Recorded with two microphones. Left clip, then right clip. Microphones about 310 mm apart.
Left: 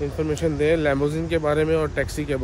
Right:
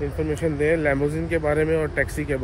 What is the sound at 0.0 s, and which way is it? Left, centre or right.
Speech, centre.